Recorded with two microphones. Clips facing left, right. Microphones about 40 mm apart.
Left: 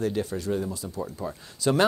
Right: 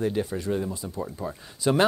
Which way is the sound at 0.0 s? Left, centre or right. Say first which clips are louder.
Right 1 dB; centre.